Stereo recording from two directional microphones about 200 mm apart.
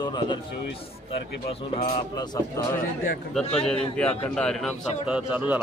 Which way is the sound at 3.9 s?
5° left (ahead or behind).